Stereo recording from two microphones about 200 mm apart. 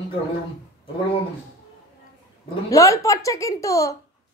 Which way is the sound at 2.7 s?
15° left (ahead or behind).